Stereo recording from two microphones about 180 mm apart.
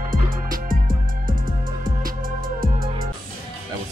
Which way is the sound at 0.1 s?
50° right (ahead or behind).